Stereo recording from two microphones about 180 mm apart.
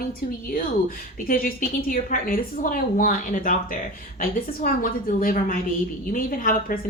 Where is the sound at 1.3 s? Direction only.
50° left (ahead or behind).